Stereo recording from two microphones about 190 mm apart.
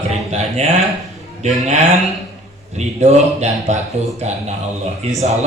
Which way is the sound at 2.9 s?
35° right (ahead or behind).